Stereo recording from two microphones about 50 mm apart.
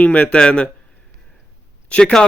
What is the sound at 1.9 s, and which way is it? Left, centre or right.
Speech, left.